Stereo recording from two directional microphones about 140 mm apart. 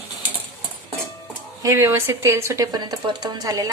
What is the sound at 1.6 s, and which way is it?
Speech, 20° right (ahead or behind).